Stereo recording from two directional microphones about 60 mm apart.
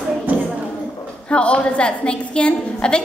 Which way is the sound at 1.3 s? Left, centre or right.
Centre.